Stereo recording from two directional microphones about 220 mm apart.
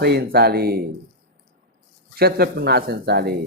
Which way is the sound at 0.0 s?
45° right (ahead or behind).